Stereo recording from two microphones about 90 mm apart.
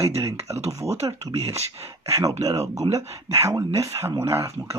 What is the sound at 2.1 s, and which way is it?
Speech, 40° right (ahead or behind).